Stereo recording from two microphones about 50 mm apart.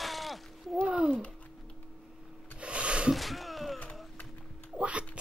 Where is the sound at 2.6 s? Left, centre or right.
Right.